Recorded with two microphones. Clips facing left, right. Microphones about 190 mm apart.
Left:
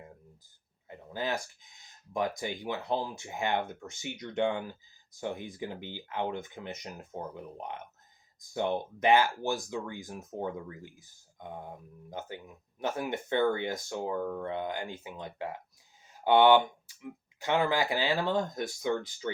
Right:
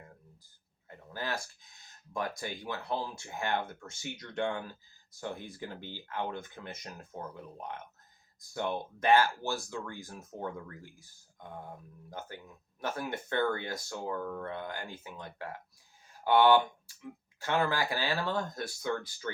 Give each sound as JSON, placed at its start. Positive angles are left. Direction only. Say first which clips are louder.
{"t": 0.9, "sound": "speech", "louder": "left 4 dB", "side_deg": 20}
{"t": 16.0, "sound": "a sound", "louder": "left 2 dB", "side_deg": 20}
{"t": 17.4, "sound": "speech", "louder": "left 3 dB", "side_deg": 20}